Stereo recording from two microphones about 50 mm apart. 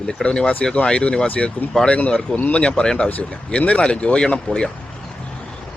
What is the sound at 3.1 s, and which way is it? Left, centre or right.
Speech, left.